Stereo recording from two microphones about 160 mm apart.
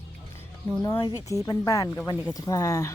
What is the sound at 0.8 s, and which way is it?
Speech, 20° left (ahead or behind).